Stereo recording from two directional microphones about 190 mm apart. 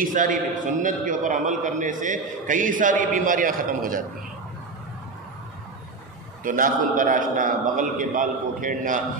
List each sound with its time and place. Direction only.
0.0 s a man's voice: 45° right (ahead or behind)
6.4 s a man's voice: 45° right (ahead or behind)